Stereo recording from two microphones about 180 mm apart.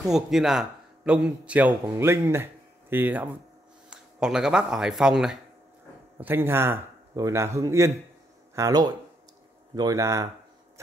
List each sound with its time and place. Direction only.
0.0 s a man's voice: centre (ahead or behind)